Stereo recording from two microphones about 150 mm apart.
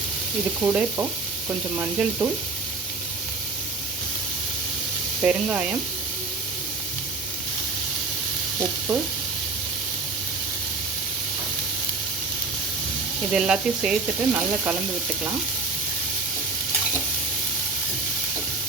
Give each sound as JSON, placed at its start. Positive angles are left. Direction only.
{"t": 0.6, "sound": "speech", "side_deg": -5}
{"t": 5.2, "sound": "speech", "side_deg": -5}
{"t": 13.3, "sound": "speech", "side_deg": -5}